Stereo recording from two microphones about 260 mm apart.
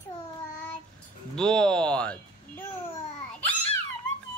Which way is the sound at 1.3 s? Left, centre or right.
Centre.